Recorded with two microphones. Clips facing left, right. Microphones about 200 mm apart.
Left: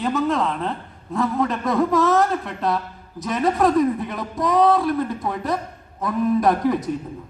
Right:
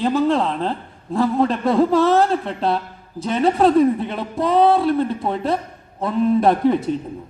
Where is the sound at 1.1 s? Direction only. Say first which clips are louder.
Right 4 dB; 30° right (ahead or behind).